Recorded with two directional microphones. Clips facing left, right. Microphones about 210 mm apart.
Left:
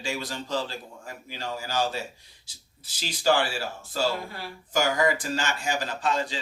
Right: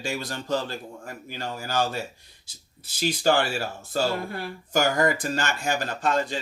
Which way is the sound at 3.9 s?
55° right (ahead or behind).